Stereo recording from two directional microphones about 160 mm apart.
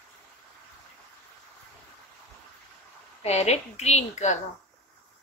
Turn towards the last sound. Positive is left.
turn(degrees=45)  # may be behind; listen again after turning